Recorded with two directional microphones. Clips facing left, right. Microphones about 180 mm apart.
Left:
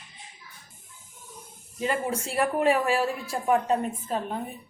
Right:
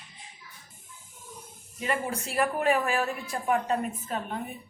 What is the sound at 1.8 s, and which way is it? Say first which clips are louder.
Speech: left 3 dB; 30° left (ahead or behind).